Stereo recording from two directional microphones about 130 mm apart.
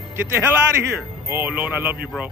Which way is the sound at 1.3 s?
15° right (ahead or behind).